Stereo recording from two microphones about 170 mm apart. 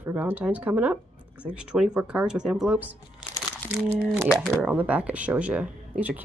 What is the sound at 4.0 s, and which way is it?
Speech, 5° right (ahead or behind).